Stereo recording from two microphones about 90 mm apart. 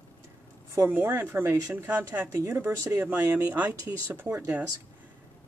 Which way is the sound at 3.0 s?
20° right (ahead or behind).